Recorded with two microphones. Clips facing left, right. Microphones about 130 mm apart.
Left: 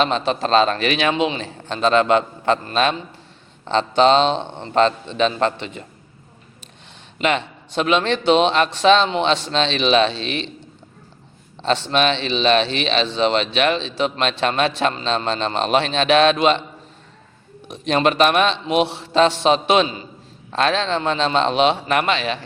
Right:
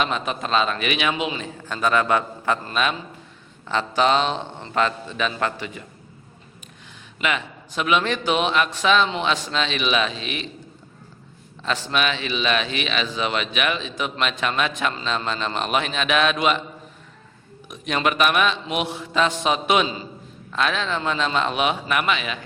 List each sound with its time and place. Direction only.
0.0 s speech: 30° left (ahead or behind)
3.7 s a man's voice: 25° left (ahead or behind)
7.2 s a man's voice: 30° left (ahead or behind)
11.6 s a man's voice: 30° left (ahead or behind)
17.7 s a man's voice: 30° left (ahead or behind)